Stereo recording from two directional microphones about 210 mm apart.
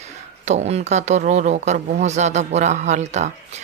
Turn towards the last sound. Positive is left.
turn(degrees=-35)  # may be behind; listen again after turning